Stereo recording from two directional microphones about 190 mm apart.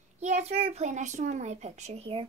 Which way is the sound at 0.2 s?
35° right (ahead or behind).